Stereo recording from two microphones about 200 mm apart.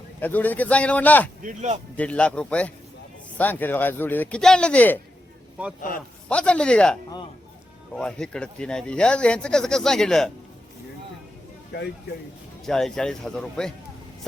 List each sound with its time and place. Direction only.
0.2 s speech: 10° left (ahead or behind)
1.5 s speech: 35° right (ahead or behind)
2.0 s speech: 5° left (ahead or behind)
6.2 s speech: 5° left (ahead or behind)
11.7 s speech: 55° left (ahead or behind)
12.6 s speech: centre (ahead or behind)